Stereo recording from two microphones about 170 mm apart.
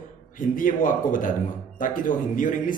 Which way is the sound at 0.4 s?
55° left (ahead or behind).